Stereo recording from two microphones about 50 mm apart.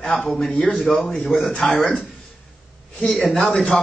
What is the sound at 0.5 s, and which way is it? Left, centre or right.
Speech, centre.